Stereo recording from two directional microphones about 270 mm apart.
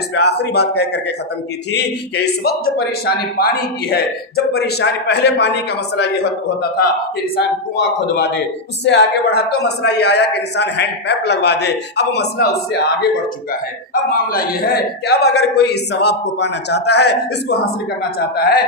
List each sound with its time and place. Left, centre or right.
0.1 s speech: left
2.4 s speech: left
7.8 s speech: left